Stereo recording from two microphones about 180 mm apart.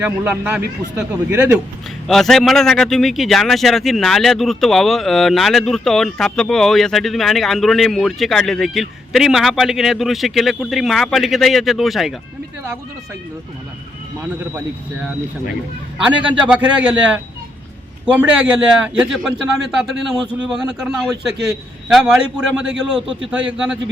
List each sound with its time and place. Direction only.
0.0 s speech: 5° right (ahead or behind)
2.0 s a man's voice: centre (ahead or behind)
16.1 s a man's voice: 25° right (ahead or behind)
16.5 s a man's voice: 5° right (ahead or behind)